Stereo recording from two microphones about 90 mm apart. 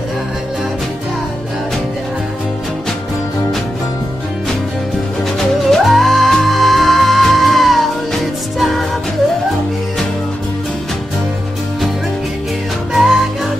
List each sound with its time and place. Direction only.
5.7 s music: centre (ahead or behind)
12.9 s music: 5° right (ahead or behind)